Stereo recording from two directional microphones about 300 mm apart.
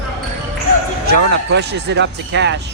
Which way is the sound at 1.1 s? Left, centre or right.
Right.